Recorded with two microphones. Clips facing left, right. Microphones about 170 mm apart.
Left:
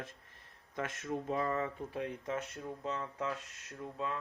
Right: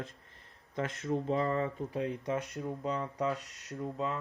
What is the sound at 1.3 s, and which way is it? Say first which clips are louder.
Speech: right 2 dB; 20° right (ahead or behind).